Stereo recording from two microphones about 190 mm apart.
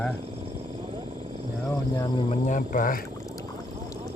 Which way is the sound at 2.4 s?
45° left (ahead or behind).